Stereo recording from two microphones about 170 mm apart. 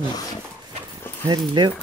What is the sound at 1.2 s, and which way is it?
Speech, 25° right (ahead or behind).